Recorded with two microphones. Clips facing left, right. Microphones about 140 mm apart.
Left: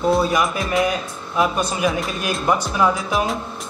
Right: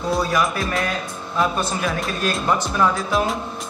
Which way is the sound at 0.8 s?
15° left (ahead or behind).